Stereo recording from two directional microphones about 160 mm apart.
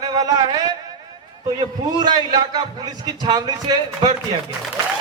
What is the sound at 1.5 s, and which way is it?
A man's voice, 25° right (ahead or behind).